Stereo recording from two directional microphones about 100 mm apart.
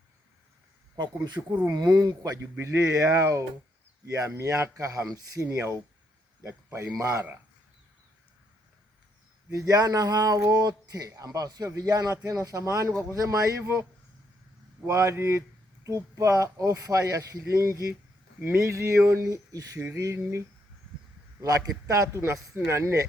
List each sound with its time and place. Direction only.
0.9 s speech: 45° right (ahead or behind)
2.4 s a man's voice: 30° right (ahead or behind)
9.5 s speech: 35° right (ahead or behind)
14.8 s speech: 30° right (ahead or behind)
18.3 s speech: 20° right (ahead or behind)
18.7 s speech: 30° right (ahead or behind)
19.8 s speech: 20° right (ahead or behind)
21.4 s speech: 35° right (ahead or behind)